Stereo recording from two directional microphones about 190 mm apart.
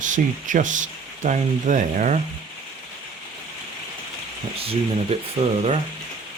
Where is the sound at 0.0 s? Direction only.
45° right (ahead or behind).